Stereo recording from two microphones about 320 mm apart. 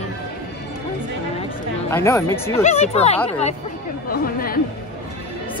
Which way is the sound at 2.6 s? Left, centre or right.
Centre.